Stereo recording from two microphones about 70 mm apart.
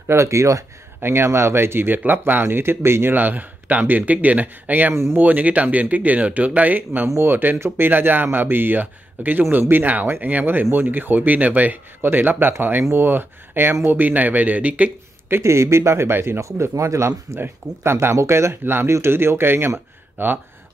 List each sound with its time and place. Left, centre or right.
0.1 s speech: right
1.0 s speech: right
4.9 s speech: right
5.2 s speech: right
15.2 s speech: right